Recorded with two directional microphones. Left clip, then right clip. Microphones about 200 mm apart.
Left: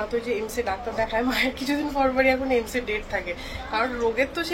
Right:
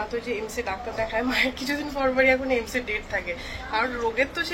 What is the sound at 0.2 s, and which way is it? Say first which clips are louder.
A woman's voice: left 3 dB; 10° left (ahead or behind).